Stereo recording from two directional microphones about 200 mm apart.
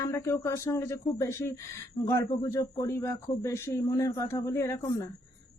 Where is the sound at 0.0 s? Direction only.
15° left (ahead or behind).